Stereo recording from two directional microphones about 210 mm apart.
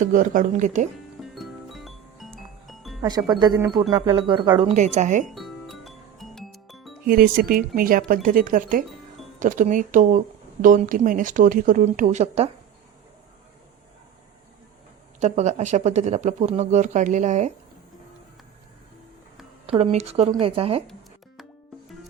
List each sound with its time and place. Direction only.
0.0 s speech: 40° right (ahead or behind)
1.2 s music: centre (ahead or behind)
3.0 s speech: 20° right (ahead or behind)
4.7 s speech: 35° right (ahead or behind)
5.3 s music: centre (ahead or behind)
7.1 s speech: 45° right (ahead or behind)
15.2 s speech: 35° right (ahead or behind)
19.6 s speech: 30° right (ahead or behind)